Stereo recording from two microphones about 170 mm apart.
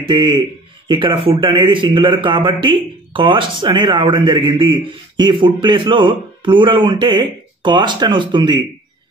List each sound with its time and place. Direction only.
0.0 s a man's voice: 30° right (ahead or behind)